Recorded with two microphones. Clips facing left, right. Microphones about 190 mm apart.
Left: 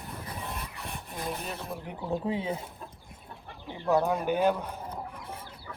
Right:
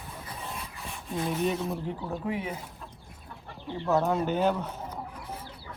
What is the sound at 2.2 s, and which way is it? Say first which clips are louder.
Speech: even; 30° left (ahead or behind).